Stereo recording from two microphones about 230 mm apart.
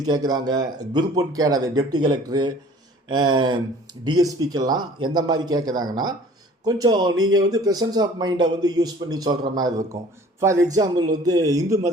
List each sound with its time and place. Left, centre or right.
0.0 s speech: centre
3.1 s a sound: centre
4.0 s speech: centre